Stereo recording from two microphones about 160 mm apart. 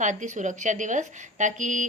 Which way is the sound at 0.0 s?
50° right (ahead or behind).